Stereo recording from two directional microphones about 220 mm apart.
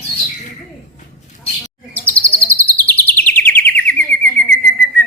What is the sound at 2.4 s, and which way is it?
Bird, 10° left (ahead or behind).